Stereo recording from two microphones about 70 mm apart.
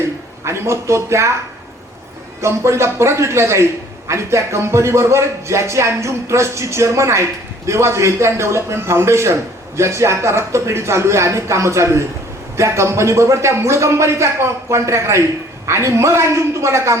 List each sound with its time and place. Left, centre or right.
0.4 s a man's voice: right
2.4 s a man's voice: right